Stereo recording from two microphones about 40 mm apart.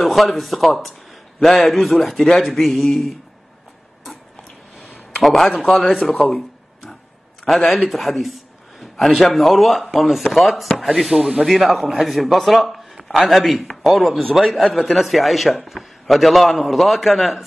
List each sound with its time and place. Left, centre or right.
0.0 s a man's voice: centre
4.8 s a sound: left
5.2 s a man's voice: centre
7.4 s a man's voice: centre